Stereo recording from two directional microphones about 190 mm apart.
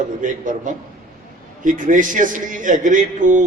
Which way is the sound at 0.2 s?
45° right (ahead or behind).